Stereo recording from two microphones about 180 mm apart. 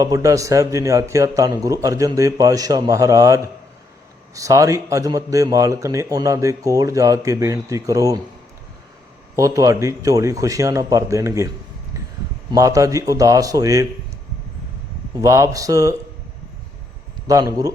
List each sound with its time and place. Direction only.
0.0 s a man's voice: 20° right (ahead or behind)
9.3 s a man's voice: 20° right (ahead or behind)
15.2 s speech: 15° right (ahead or behind)
17.2 s a man's voice: 20° right (ahead or behind)